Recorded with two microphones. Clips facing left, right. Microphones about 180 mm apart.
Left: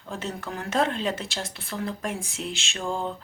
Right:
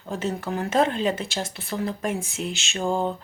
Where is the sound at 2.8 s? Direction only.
35° right (ahead or behind).